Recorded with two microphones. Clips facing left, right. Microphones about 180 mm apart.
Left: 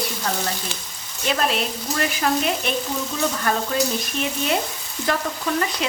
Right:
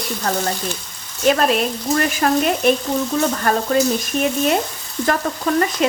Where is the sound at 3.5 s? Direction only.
45° right (ahead or behind).